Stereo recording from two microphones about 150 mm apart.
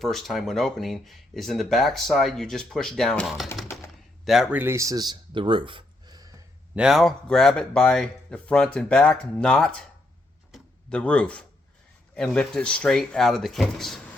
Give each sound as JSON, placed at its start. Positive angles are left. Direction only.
{"t": 0.0, "sound": "speech", "side_deg": 0}
{"t": 4.6, "sound": "speech", "side_deg": -20}
{"t": 6.7, "sound": "speech", "side_deg": -5}
{"t": 10.5, "sound": "a sound", "side_deg": 5}
{"t": 12.1, "sound": "speech", "side_deg": 5}